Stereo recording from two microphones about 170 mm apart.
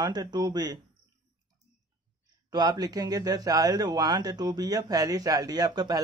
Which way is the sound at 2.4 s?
25° right (ahead or behind).